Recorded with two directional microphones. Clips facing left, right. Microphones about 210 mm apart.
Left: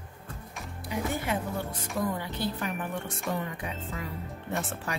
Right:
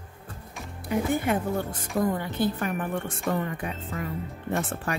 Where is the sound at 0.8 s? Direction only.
55° right (ahead or behind).